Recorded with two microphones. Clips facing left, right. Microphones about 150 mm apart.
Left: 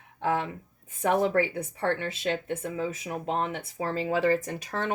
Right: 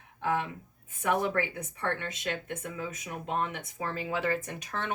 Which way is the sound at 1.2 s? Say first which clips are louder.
Left 6 dB; 30° left (ahead or behind).